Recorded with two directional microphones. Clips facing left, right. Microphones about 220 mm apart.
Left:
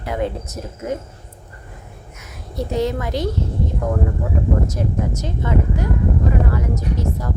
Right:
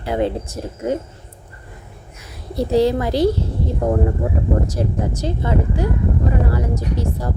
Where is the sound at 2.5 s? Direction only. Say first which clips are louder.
Right 5 dB; 35° right (ahead or behind).